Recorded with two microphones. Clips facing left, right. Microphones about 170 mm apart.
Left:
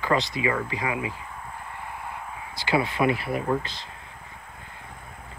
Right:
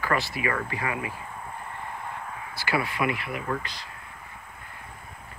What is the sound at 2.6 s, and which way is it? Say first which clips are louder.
Speech: left 4 dB; 25° left (ahead or behind).